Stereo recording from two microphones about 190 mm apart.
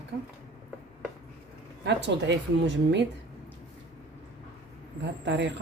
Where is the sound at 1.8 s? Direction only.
65° right (ahead or behind).